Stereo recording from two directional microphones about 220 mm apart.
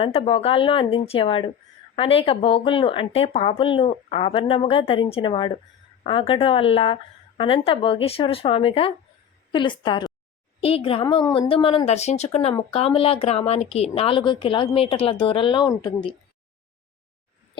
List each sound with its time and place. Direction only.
0.0 s speech: 25° left (ahead or behind)